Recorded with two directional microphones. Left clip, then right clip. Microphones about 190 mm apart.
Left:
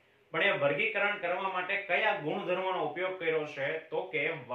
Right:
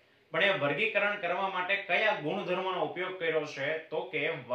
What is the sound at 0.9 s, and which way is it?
Speech, 20° right (ahead or behind).